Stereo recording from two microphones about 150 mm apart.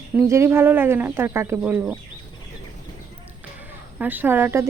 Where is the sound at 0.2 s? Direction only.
20° right (ahead or behind).